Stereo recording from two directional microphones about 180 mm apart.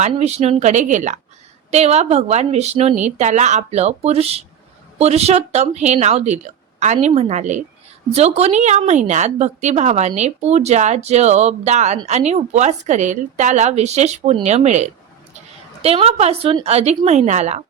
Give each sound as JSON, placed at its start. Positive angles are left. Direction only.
{"t": 0.1, "sound": "speech", "side_deg": -35}